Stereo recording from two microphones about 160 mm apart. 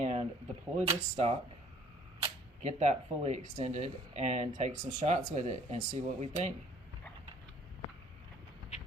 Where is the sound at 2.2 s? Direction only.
45° right (ahead or behind).